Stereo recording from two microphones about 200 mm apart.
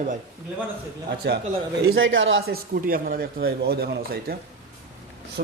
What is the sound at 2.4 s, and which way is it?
A man's voice, 45° right (ahead or behind).